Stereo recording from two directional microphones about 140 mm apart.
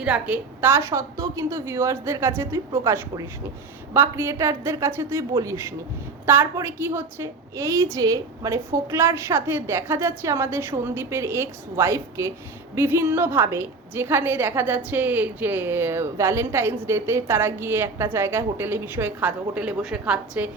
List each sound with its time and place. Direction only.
0.0 s a woman's voice: 10° right (ahead or behind)